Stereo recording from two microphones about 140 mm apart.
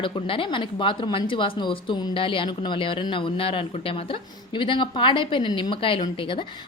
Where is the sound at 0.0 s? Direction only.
40° left (ahead or behind).